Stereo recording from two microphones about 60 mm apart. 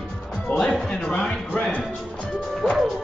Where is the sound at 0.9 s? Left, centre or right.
Centre.